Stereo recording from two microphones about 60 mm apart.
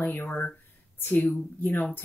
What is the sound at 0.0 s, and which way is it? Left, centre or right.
Speech, left.